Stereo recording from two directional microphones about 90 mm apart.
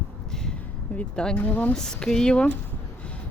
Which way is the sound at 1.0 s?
10° left (ahead or behind).